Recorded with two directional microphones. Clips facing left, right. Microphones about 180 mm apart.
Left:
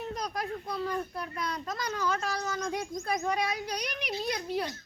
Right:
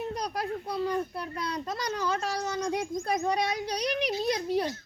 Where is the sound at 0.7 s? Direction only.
30° right (ahead or behind).